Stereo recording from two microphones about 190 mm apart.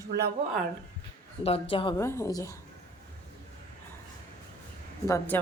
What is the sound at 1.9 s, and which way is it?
Speech, 15° left (ahead or behind).